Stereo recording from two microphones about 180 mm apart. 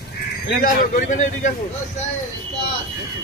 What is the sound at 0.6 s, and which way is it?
Speech, 45° left (ahead or behind).